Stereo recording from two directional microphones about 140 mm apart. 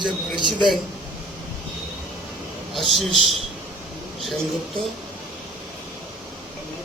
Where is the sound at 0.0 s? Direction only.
35° right (ahead or behind).